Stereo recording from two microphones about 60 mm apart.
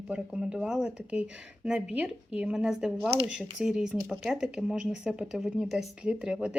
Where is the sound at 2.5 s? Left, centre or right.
Centre.